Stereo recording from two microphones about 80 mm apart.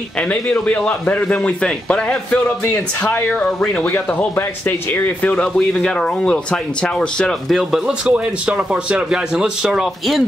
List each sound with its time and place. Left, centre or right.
0.3 s speech: centre
8.0 s a man's voice: centre